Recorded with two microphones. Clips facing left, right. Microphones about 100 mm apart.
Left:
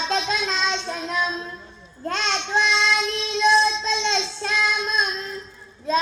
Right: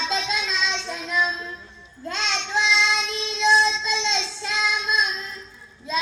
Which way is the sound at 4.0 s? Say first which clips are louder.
Left 3 dB; 55° left (ahead or behind).